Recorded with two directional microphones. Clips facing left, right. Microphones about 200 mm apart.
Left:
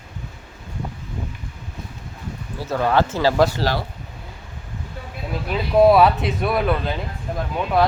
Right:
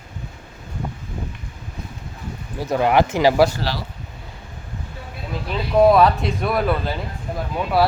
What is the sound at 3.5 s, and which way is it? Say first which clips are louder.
Speech: left 4 dB; 45° left (ahead or behind).